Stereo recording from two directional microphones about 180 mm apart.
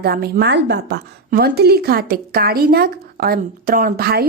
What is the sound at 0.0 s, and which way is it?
A woman's voice, 60° right (ahead or behind).